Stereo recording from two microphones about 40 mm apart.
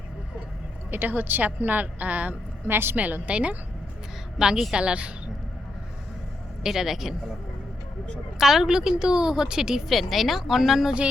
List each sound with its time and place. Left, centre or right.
0.9 s speech: right
2.6 s a woman's voice: right
2.9 s speech: right
3.2 s a woman's voice: right
4.4 s a woman's voice: centre
4.7 s a woman's voice: right
6.6 s a woman's voice: centre
8.4 s a woman's voice: centre
9.9 s a woman's voice: centre